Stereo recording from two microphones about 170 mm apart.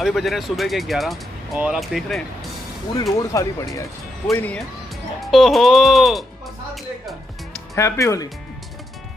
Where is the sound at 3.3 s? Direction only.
20° left (ahead or behind); by 6.2 s centre (ahead or behind).